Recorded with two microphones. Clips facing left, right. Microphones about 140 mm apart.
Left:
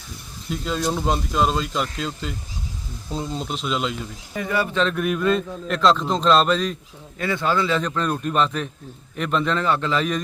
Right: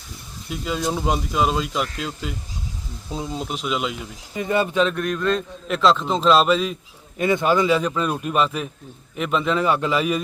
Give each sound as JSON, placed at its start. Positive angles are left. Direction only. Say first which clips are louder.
{"t": 0.5, "sound": "speech", "louder": "even", "side_deg": -5}
{"t": 4.4, "sound": "speech", "louder": "right 2 dB", "side_deg": -20}
{"t": 4.7, "sound": "a man's voice", "louder": "right 2 dB", "side_deg": -10}
{"t": 4.9, "sound": "speech", "louder": "left 1 dB", "side_deg": 5}
{"t": 7.2, "sound": "a man's voice", "louder": "right 4 dB", "side_deg": -20}